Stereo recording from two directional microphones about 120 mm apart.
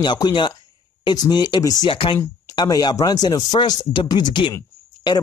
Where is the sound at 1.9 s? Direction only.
45° left (ahead or behind).